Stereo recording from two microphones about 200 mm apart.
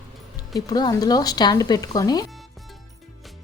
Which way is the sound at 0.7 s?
20° left (ahead or behind).